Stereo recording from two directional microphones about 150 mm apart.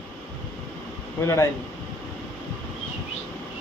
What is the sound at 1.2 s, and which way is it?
Speech, 20° left (ahead or behind).